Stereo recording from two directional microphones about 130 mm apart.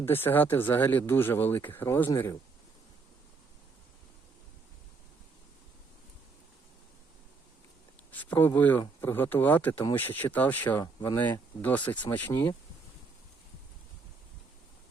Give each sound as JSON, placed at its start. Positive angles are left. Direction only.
{"t": 0.0, "sound": "speech", "side_deg": 15}
{"t": 8.1, "sound": "speech", "side_deg": 10}